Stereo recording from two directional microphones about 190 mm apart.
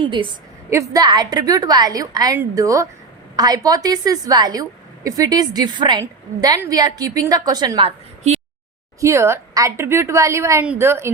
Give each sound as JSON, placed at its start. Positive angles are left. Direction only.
{"t": 0.0, "sound": "a woman's voice", "side_deg": -25}
{"t": 9.0, "sound": "a woman's voice", "side_deg": -15}